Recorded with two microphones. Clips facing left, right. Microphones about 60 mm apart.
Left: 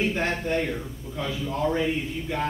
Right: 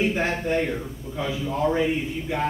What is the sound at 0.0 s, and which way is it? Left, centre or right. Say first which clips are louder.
A man's voice: right 2 dB; centre.